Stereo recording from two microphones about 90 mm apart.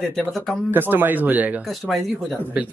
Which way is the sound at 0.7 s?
20° right (ahead or behind).